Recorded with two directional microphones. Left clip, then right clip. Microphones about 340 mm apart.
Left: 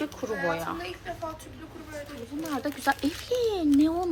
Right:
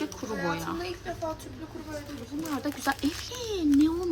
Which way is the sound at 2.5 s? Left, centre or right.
Centre.